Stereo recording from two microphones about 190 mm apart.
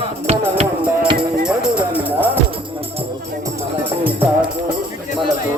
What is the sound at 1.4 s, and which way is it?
Music, 5° right (ahead or behind).